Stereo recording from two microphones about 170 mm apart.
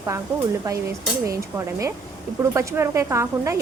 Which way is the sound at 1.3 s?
20° right (ahead or behind).